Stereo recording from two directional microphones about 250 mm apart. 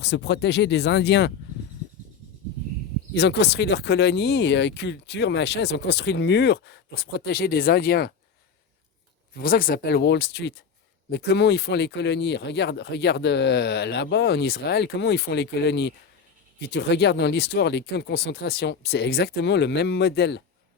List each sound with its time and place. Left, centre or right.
0.0 s speech: left
3.2 s speech: left
9.3 s speech: left